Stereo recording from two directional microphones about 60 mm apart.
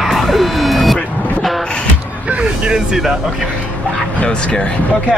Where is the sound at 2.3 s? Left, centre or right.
Centre.